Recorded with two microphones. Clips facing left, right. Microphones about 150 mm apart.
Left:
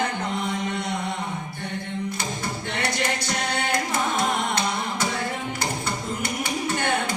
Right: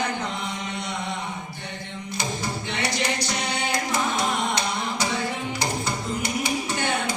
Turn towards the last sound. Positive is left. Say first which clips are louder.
# left 1 dB
turn(degrees=50)  # may be behind; listen again after turning